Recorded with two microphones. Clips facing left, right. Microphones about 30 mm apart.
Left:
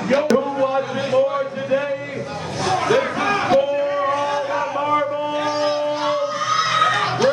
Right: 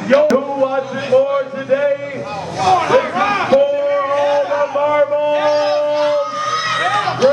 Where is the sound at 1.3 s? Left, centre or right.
Centre.